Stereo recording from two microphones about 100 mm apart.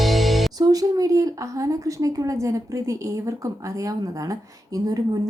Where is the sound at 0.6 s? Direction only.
40° right (ahead or behind).